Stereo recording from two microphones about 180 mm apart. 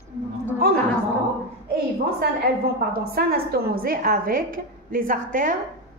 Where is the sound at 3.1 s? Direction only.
55° right (ahead or behind).